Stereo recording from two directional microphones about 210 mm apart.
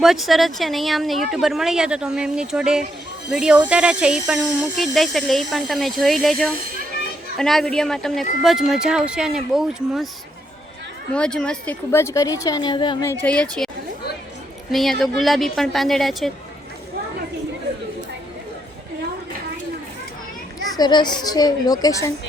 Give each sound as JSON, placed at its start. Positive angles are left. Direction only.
{"t": 0.0, "sound": "speech", "side_deg": 0}
{"t": 11.1, "sound": "a woman's voice", "side_deg": 5}
{"t": 13.2, "sound": "speech", "side_deg": 5}
{"t": 14.7, "sound": "speech", "side_deg": 0}
{"t": 20.7, "sound": "a child's voice", "side_deg": 20}